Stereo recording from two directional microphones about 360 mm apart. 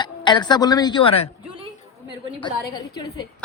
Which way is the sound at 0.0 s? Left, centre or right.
Centre.